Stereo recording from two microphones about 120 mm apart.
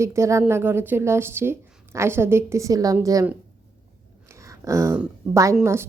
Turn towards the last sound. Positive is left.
turn(degrees=-20)  # may be behind; listen again after turning